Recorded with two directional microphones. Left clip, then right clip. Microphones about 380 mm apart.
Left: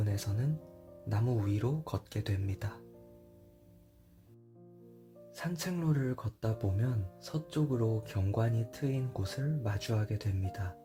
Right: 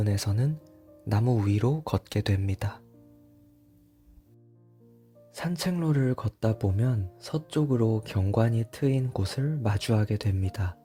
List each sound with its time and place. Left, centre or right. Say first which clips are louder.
0.0 s speech: right 8 dB; right
5.3 s speech: right 7 dB; right